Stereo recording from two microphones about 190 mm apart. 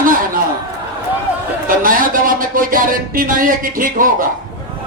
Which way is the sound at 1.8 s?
45° right (ahead or behind).